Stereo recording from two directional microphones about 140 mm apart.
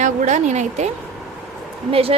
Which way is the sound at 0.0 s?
60° right (ahead or behind).